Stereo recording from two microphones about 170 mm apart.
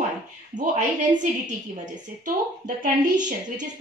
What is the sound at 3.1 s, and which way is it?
Speech, 50° right (ahead or behind).